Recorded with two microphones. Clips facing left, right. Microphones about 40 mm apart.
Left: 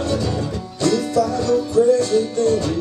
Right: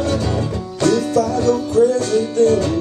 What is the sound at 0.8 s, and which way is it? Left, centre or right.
Music, right.